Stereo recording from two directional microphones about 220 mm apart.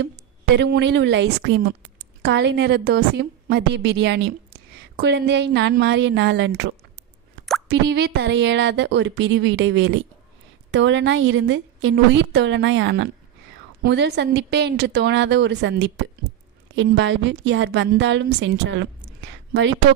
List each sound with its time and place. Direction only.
0.5 s a woman's voice: 50° right (ahead or behind)